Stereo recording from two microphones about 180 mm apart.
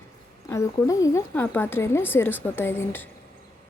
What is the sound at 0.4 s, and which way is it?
A woman's voice, 15° left (ahead or behind).